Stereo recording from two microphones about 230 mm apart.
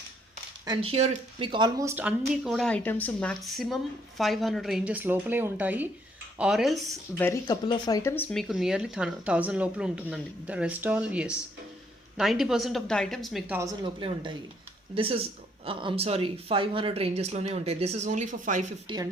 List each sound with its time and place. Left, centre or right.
0.6 s a woman's voice: right; by 6.7 s centre
7.2 s speech: centre
13.6 s speech: centre; by 18.6 s right
18.9 s speech: right